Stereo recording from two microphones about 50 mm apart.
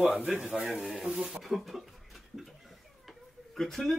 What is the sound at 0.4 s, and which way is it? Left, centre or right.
Speech, centre.